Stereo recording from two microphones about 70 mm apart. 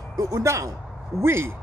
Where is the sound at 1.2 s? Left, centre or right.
Right.